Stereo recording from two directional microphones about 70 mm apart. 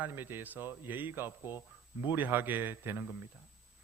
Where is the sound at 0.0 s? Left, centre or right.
Right.